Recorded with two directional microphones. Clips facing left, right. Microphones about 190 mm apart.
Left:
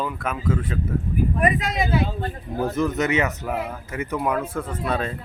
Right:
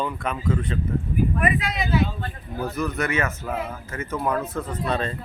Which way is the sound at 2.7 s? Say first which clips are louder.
Left 3 dB; 20° left (ahead or behind).